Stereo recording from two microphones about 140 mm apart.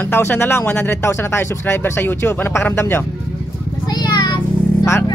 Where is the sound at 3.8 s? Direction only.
30° left (ahead or behind).